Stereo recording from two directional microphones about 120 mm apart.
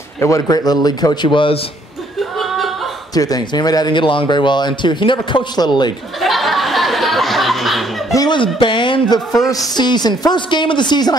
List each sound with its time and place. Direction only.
0.2 s speech: 30° left (ahead or behind)
2.3 s chuckle: centre (ahead or behind)
3.2 s speech: 30° left (ahead or behind)
6.2 s a sound: centre (ahead or behind)
8.1 s chuckle: 30° left (ahead or behind)
8.4 s a sound: 45° left (ahead or behind)
9.3 s speech: 30° left (ahead or behind)